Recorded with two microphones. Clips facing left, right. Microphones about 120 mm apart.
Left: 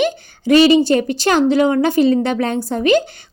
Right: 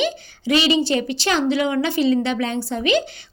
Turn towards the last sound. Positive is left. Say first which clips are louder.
# left 5 dB
turn(degrees=45)  # may be behind; listen again after turning